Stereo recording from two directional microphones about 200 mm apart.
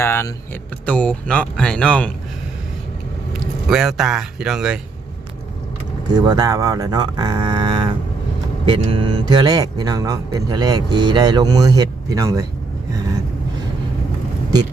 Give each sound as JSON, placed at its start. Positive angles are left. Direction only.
{"t": 0.0, "sound": "speech", "side_deg": 10}
{"t": 3.4, "sound": "speech", "side_deg": 0}
{"t": 6.1, "sound": "speech", "side_deg": -20}